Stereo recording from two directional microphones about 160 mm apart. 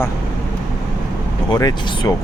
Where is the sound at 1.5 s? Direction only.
25° left (ahead or behind).